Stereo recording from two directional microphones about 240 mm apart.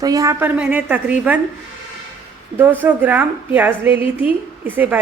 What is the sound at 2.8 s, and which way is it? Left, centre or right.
A woman's voice, centre.